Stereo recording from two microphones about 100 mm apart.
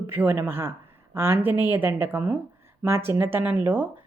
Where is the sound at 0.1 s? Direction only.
20° right (ahead or behind).